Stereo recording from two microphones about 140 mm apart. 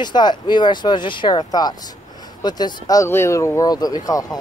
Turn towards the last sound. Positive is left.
turn(degrees=25)  # may be behind; listen again after turning